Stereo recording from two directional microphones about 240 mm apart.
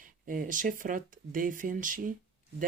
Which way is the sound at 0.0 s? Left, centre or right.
Right.